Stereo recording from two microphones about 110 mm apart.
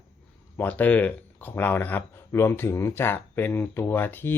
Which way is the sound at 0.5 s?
15° left (ahead or behind).